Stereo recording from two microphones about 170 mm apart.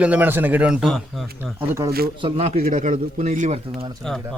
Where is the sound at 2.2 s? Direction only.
40° right (ahead or behind).